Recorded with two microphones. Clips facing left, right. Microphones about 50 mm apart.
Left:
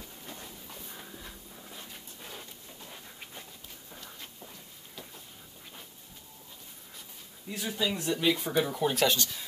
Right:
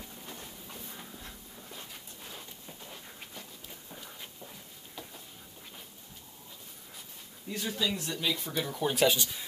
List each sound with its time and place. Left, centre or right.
0.7 s dog: centre
1.1 s a sound: centre
2.8 s pant: centre
3.9 s a sound: centre
7.4 s speech: centre
8.6 s speech: centre
8.9 s speech: centre